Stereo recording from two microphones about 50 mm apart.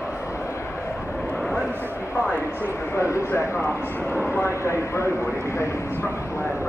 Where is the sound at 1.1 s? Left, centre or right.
Left.